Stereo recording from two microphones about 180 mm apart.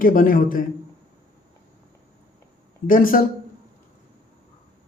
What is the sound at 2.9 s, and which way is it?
Speech, 50° left (ahead or behind).